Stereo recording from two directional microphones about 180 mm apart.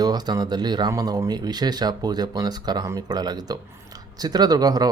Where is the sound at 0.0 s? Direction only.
20° right (ahead or behind).